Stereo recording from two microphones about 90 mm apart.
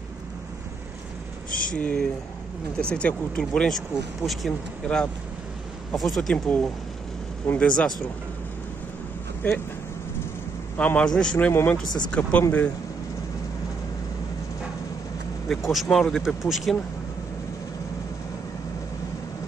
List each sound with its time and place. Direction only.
1.8 s speech: 15° left (ahead or behind)
6.3 s speech: 10° left (ahead or behind)
9.4 s speech: 20° left (ahead or behind)
10.8 s speech: 15° left (ahead or behind)
15.4 s speech: centre (ahead or behind)